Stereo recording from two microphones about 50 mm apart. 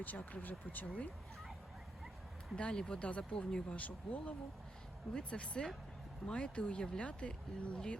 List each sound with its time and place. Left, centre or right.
0.0 s speech: left
2.6 s speech: centre
3.8 s speech: left
5.1 s speech: centre